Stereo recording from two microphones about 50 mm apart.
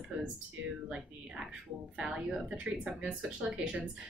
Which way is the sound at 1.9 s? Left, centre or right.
Right.